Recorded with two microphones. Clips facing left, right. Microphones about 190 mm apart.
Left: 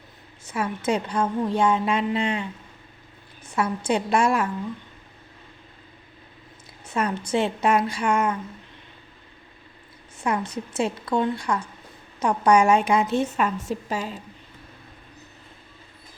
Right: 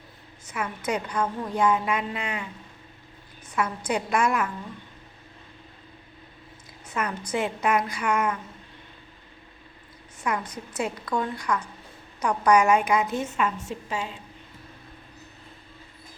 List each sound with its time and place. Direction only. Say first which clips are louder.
0.4 s a woman's voice: left 5 dB; 30° left (ahead or behind)
3.5 s a woman's voice: left 3 dB; 30° left (ahead or behind)
6.8 s a woman's voice: left 4 dB; 30° left (ahead or behind)
10.2 s a woman's voice: left 3 dB; 25° left (ahead or behind)